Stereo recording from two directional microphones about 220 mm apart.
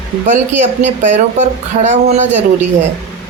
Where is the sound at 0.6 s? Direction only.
30° right (ahead or behind).